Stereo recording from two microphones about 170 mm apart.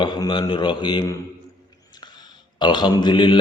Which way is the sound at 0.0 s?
25° left (ahead or behind).